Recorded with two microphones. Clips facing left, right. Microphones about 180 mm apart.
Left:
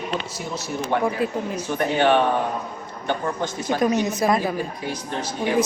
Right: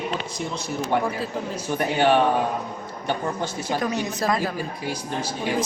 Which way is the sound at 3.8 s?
20° left (ahead or behind).